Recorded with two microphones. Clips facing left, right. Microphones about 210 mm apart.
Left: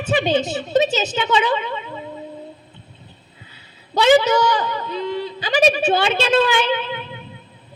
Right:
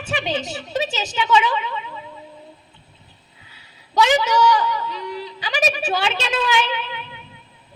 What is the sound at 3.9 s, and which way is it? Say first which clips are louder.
A woman's voice: left 4 dB; 35° left (ahead or behind).